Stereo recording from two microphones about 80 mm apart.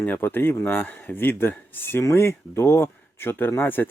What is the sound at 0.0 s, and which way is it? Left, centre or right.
Speech, left.